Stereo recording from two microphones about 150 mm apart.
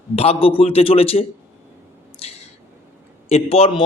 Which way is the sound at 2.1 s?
45° left (ahead or behind).